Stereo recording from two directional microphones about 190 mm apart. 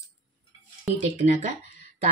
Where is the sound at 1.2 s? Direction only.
40° right (ahead or behind).